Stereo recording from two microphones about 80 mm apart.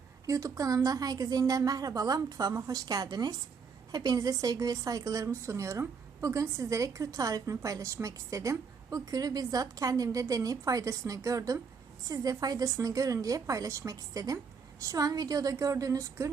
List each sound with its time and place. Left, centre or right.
0.3 s a woman's voice: right